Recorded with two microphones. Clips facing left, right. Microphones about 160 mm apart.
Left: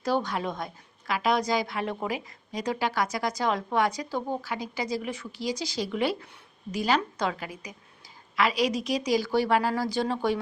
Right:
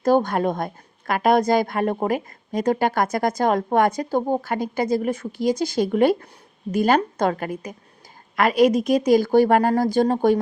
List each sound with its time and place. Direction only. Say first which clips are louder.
0.0 s a woman's voice: right 9 dB; 50° right (ahead or behind)